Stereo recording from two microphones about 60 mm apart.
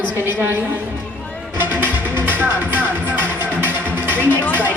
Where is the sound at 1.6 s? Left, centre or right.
Right.